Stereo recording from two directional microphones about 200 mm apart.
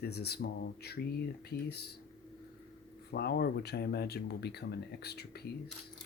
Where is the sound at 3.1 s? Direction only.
55° left (ahead or behind).